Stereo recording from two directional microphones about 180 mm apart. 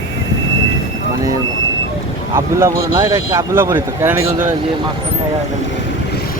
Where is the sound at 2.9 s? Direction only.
15° right (ahead or behind).